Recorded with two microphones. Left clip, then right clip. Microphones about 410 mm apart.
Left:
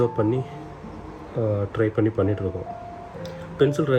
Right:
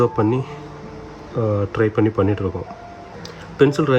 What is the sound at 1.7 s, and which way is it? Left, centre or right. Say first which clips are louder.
Speech: right 5 dB; centre.